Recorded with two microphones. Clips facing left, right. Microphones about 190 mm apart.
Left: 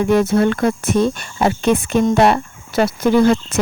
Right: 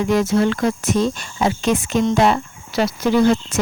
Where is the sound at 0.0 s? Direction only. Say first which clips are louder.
Left 3 dB; 55° left (ahead or behind).